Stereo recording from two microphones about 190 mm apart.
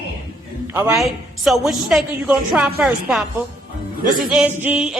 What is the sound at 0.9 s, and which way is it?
A woman's voice, centre (ahead or behind).